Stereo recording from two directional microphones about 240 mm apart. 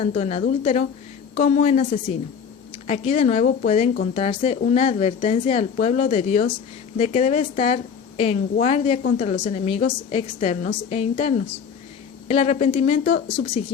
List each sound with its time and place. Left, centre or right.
0.0 s a woman's voice: left